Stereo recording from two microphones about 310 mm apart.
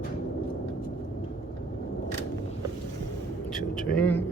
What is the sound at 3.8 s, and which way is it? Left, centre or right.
Vehicle, centre.